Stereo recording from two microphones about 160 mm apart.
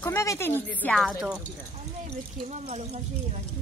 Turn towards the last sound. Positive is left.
turn(degrees=-40)  # may be behind; listen again after turning